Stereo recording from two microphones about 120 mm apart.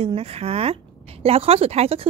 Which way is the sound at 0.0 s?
55° right (ahead or behind).